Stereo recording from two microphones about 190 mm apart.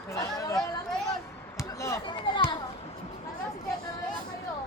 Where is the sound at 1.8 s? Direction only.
15° left (ahead or behind).